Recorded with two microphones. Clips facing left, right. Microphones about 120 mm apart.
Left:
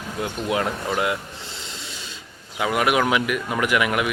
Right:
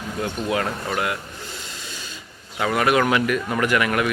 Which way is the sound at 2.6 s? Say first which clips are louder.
Right 1 dB; 10° left (ahead or behind).